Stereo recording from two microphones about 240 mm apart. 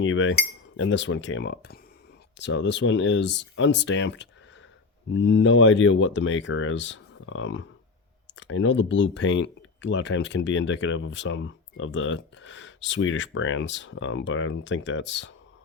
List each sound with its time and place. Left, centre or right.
0.0 s speech: left